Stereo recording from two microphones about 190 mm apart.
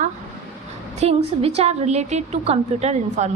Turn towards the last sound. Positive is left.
turn(degrees=-35)  # may be behind; listen again after turning